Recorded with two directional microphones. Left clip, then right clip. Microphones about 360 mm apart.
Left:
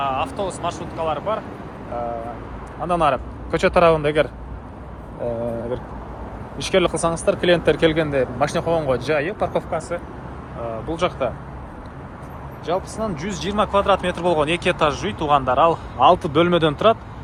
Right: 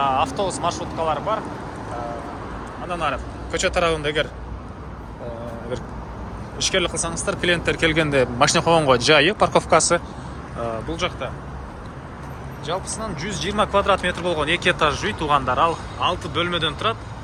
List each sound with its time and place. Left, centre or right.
0.0 s speech: centre
2.8 s speech: centre
6.6 s speech: centre
10.7 s speech: centre
12.6 s speech: centre